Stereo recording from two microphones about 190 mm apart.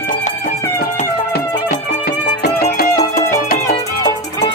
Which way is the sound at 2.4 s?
60° left (ahead or behind).